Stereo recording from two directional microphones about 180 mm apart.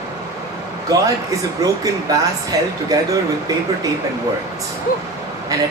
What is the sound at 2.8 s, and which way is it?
Speech, 20° right (ahead or behind).